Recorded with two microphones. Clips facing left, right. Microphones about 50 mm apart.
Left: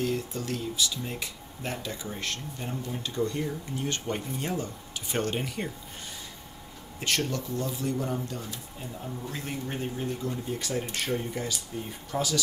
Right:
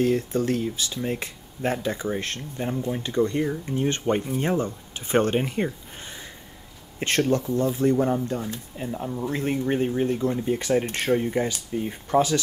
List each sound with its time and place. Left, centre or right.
0.0 s speech: right